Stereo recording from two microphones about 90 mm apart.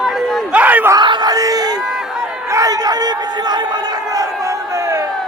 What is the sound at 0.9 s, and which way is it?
Speech, 55° right (ahead or behind).